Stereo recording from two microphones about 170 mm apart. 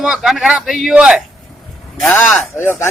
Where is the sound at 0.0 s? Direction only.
5° right (ahead or behind).